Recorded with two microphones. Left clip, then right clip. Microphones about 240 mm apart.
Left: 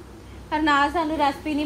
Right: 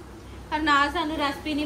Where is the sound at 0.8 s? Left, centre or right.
Left.